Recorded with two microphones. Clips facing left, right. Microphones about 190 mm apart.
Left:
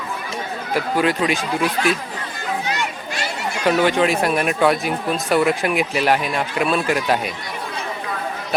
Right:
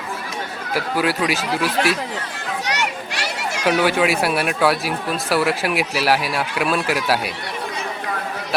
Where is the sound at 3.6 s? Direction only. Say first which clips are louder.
Left 1 dB; 5° right (ahead or behind).